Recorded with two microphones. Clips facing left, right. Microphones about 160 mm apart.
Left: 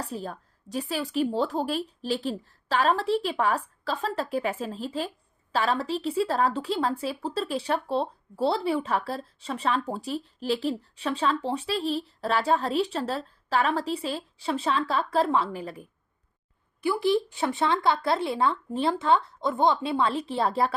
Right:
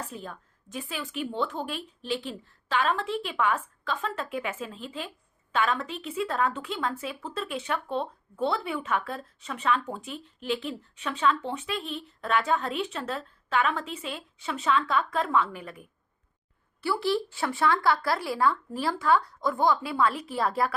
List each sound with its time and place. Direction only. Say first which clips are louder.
0.0 s a woman's voice: left 5 dB; 35° left (ahead or behind)
16.8 s speech: left 3 dB; 15° left (ahead or behind)